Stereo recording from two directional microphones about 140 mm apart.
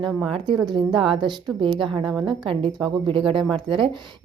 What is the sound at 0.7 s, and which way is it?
Speech, 35° right (ahead or behind).